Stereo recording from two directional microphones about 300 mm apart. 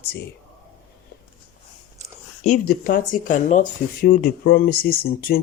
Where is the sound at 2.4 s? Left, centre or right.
Left.